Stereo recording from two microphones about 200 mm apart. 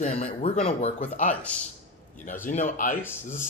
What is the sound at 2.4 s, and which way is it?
Speech, 40° left (ahead or behind).